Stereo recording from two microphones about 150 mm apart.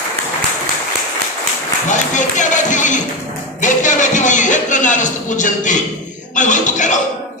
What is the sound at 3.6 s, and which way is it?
Speech, 55° left (ahead or behind).